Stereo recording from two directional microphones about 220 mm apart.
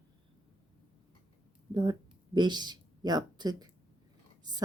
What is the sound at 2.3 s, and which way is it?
Speech, 20° right (ahead or behind).